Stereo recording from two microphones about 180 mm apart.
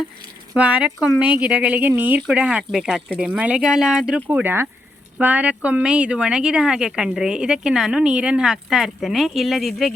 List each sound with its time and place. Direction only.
0.5 s speech: 5° right (ahead or behind)